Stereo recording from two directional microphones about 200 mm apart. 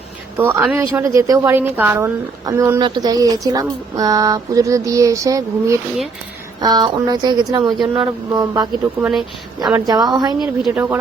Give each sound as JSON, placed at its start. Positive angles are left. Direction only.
{"t": 0.3, "sound": "a woman's voice", "side_deg": -10}
{"t": 9.0, "sound": "speech", "side_deg": -5}
{"t": 9.7, "sound": "speech", "side_deg": -20}
{"t": 10.6, "sound": "a woman's voice", "side_deg": -10}